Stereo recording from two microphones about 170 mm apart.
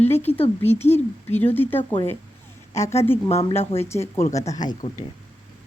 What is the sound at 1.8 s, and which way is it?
Speech, 30° left (ahead or behind).